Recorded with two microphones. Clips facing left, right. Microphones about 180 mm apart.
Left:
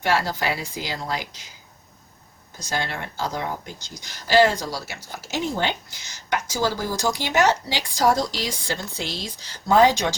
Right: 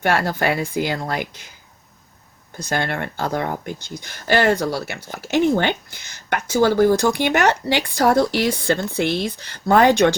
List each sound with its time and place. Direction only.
0.0 s speech: 55° right (ahead or behind)
2.6 s speech: 55° right (ahead or behind)